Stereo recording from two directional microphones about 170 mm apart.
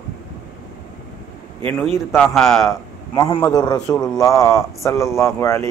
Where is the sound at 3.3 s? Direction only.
20° left (ahead or behind).